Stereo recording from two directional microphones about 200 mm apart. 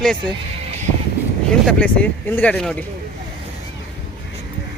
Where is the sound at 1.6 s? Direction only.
5° left (ahead or behind).